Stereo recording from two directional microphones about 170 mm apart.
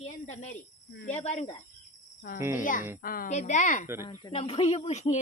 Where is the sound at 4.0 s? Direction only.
20° left (ahead or behind).